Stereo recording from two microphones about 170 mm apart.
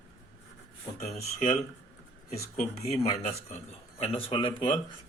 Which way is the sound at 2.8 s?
40° left (ahead or behind).